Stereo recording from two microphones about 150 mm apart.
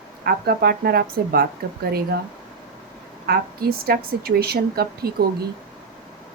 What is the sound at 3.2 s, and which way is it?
A woman's voice, 90° right.